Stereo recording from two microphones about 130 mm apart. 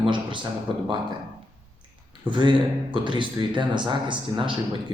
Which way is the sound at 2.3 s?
35° right (ahead or behind).